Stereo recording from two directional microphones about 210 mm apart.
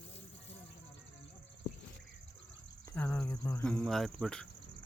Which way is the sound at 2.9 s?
10° left (ahead or behind).